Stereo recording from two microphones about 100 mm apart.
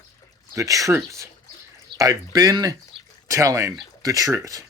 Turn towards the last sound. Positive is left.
turn(degrees=-30)  # may be behind; listen again after turning